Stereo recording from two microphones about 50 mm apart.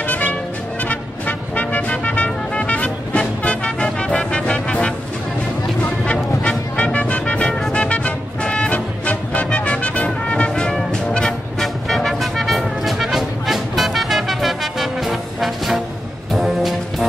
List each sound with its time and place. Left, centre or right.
0.0 s music: left
6.8 s music: left
11.6 s music: centre